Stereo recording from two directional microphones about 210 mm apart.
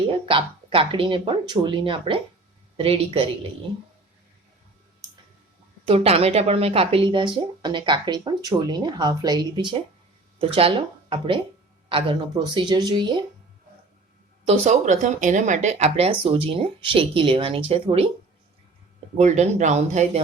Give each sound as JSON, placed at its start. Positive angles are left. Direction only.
{"t": 0.1, "sound": "speech", "side_deg": -25}
{"t": 5.8, "sound": "speech", "side_deg": -30}
{"t": 14.4, "sound": "speech", "side_deg": -30}
{"t": 19.1, "sound": "speech", "side_deg": -35}